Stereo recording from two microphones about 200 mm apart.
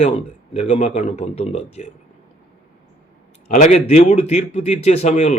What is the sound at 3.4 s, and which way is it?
A man's voice, 35° left (ahead or behind).